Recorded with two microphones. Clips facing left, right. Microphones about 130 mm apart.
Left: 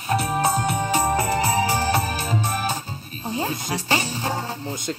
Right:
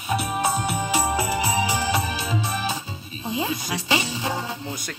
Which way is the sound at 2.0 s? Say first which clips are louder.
Left 2 dB; 45° left (ahead or behind).